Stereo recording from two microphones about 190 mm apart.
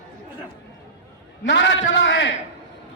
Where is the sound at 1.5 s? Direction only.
70° left (ahead or behind).